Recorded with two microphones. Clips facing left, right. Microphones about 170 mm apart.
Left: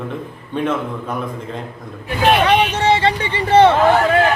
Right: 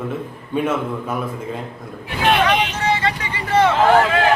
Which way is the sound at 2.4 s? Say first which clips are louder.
Left 4 dB; 30° left (ahead or behind).